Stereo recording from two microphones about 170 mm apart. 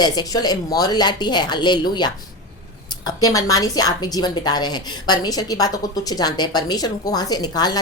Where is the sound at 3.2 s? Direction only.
20° left (ahead or behind).